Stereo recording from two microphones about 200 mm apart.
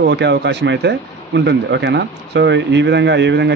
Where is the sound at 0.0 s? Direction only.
60° right (ahead or behind).